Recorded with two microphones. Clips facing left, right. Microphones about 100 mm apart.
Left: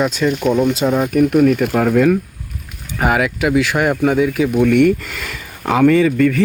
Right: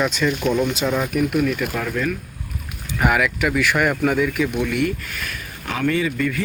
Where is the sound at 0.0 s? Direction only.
25° left (ahead or behind).